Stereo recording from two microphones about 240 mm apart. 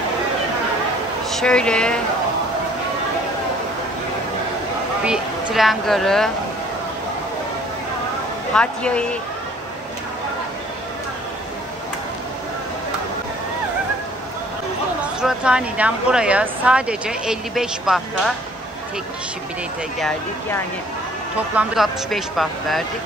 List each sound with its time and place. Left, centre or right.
1.3 s speech: centre
5.0 s speech: centre
8.5 s speech: centre
15.1 s speech: centre
20.0 s speech: centre